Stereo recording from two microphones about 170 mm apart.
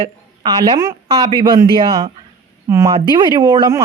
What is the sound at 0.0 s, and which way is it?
Speech, 25° right (ahead or behind).